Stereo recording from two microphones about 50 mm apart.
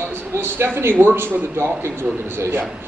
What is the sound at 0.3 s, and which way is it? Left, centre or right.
A man's voice, right.